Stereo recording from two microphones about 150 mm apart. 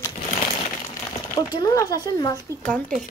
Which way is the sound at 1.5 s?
25° left (ahead or behind).